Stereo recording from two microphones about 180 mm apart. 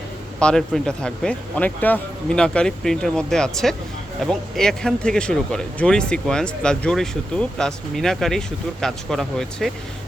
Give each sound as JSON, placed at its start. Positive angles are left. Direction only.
{"t": 0.3, "sound": "speech", "side_deg": 5}